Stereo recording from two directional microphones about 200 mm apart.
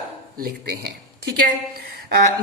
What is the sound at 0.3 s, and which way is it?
A woman's voice, 55° right (ahead or behind).